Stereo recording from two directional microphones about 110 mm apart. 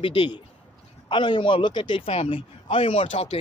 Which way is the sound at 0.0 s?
50° left (ahead or behind).